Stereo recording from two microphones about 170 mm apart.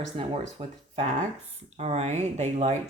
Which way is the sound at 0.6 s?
30° right (ahead or behind).